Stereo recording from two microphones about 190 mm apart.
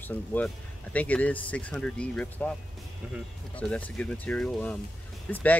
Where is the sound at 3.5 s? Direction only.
5° left (ahead or behind).